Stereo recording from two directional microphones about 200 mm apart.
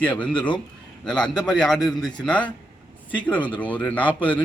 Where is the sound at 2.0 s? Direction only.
20° left (ahead or behind).